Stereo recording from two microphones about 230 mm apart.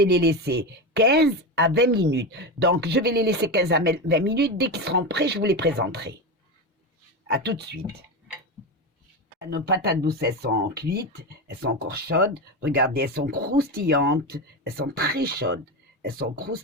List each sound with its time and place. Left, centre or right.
0.0 s speech: right
7.3 s speech: right
9.5 s speech: right